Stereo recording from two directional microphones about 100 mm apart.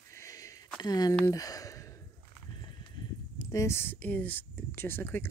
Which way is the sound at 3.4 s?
35° left (ahead or behind).